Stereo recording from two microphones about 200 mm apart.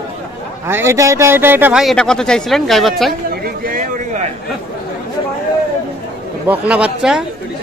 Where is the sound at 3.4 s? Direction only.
45° right (ahead or behind).